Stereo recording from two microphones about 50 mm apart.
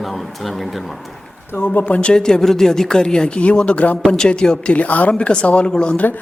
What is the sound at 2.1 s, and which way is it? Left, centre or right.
Speech, centre.